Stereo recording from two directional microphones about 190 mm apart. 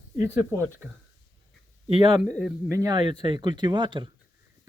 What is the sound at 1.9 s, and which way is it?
Speech, 25° right (ahead or behind).